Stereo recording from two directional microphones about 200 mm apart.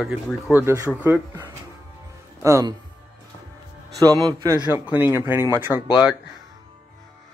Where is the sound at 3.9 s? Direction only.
20° right (ahead or behind).